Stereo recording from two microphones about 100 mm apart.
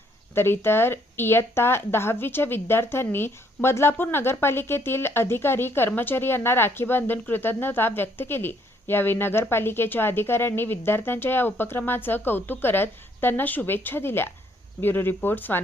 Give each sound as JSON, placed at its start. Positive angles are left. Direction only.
{"t": 0.3, "sound": "speech", "side_deg": 25}